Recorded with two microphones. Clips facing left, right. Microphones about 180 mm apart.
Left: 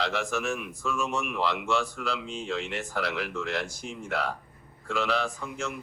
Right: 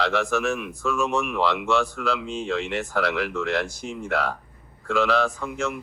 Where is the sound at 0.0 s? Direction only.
70° right (ahead or behind).